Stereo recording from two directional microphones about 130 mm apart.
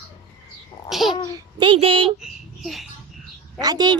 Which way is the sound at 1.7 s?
45° right (ahead or behind).